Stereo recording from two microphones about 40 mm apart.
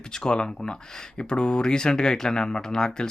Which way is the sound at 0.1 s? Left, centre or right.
Left.